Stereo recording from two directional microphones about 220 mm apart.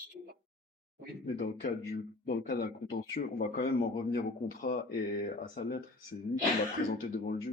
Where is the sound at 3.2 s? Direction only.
40° left (ahead or behind).